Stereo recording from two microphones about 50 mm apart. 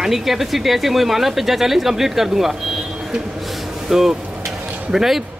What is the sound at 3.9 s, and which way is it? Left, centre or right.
Speech, centre.